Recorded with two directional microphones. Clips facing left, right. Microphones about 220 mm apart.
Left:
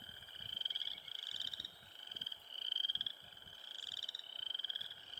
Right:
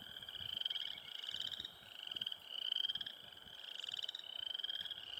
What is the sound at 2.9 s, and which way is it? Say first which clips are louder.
Frog: right 1 dB; 20° right (ahead or behind).